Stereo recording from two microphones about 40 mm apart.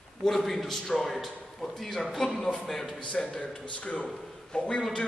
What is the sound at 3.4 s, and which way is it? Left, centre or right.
A man's voice, left.